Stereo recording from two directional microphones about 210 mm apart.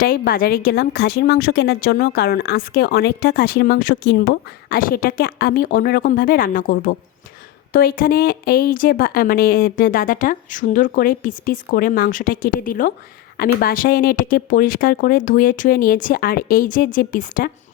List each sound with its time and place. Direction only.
0.0 s speech: 45° left (ahead or behind)